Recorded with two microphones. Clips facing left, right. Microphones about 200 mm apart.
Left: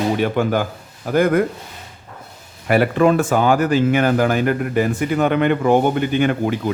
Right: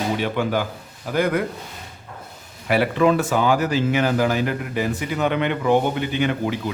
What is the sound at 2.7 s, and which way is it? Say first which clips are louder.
Speech: left 3 dB; 50° left (ahead or behind).